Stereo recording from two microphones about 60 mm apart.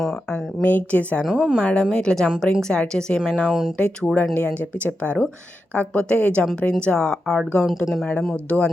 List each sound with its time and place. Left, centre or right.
0.6 s speech: left
1.4 s speech: centre
1.7 s speech: centre
3.4 s speech: centre
3.8 s speech: left